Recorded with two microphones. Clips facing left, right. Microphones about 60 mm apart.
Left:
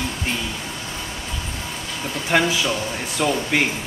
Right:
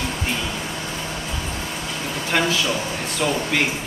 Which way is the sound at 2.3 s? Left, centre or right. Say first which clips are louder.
Left 2 dB; centre.